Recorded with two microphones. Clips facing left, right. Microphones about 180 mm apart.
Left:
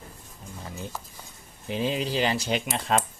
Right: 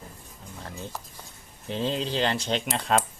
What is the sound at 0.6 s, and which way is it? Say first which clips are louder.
Speech: even; 5° left (ahead or behind).